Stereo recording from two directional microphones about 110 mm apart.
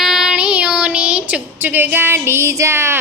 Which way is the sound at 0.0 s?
5° right (ahead or behind).